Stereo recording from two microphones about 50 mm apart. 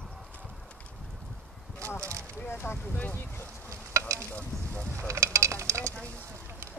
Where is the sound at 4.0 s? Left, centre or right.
Right.